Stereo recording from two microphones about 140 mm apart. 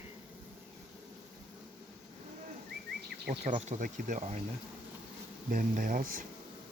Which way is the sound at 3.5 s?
60° right (ahead or behind).